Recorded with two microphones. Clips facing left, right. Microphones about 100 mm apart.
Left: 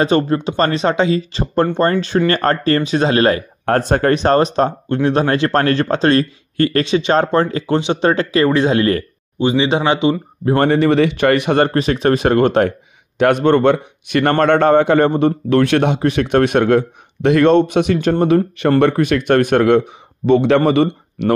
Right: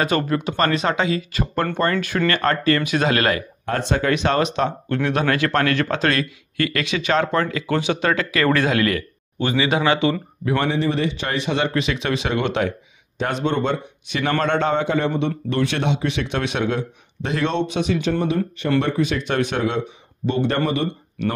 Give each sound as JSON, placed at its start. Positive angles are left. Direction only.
{"t": 0.0, "sound": "a man's voice", "side_deg": 30}
{"t": 3.6, "sound": "speech", "side_deg": 55}
{"t": 4.1, "sound": "a man's voice", "side_deg": 35}
{"t": 10.4, "sound": "a man's voice", "side_deg": 40}
{"t": 10.7, "sound": "a man's voice", "side_deg": 70}
{"t": 13.2, "sound": "a man's voice", "side_deg": 60}